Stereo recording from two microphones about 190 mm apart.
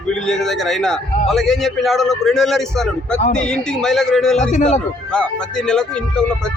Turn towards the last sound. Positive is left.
turn(degrees=40)  # may be behind; listen again after turning